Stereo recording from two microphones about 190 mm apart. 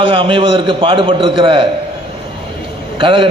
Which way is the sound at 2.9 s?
25° right (ahead or behind).